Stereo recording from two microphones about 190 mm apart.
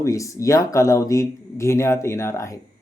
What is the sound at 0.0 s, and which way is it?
Speech, 15° left (ahead or behind).